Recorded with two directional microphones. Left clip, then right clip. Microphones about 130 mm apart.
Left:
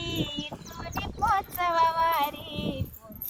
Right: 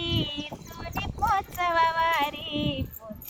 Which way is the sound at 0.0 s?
90° left.